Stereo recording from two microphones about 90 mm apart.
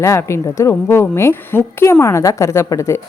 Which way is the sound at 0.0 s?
35° left (ahead or behind).